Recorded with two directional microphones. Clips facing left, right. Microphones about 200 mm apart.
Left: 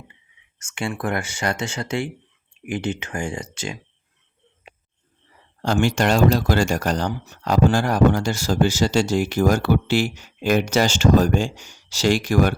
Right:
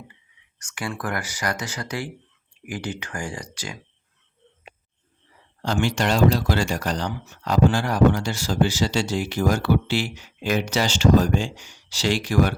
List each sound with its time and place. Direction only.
0.6 s speech: 25° left (ahead or behind)
5.6 s speech: 45° left (ahead or behind)